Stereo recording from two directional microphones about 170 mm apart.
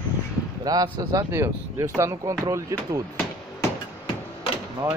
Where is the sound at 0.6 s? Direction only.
20° right (ahead or behind).